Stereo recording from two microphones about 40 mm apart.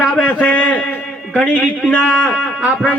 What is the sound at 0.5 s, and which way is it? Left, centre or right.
A man's voice, left.